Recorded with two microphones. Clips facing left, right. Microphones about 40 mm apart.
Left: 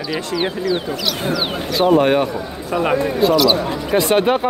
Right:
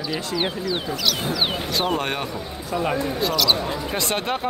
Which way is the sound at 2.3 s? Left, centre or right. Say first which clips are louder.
Left 5 dB; left.